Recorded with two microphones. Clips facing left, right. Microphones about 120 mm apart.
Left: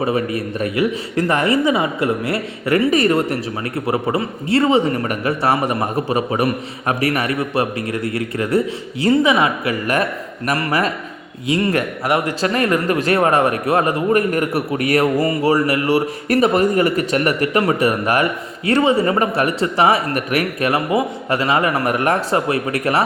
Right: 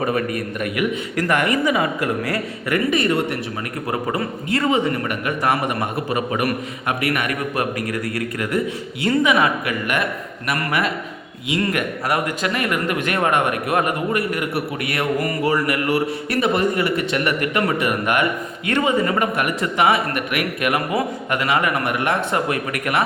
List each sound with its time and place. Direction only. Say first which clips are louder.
0.0 s a man's voice: left 2 dB; 25° left (ahead or behind)
3.8 s a man's voice: left 3 dB; 25° left (ahead or behind)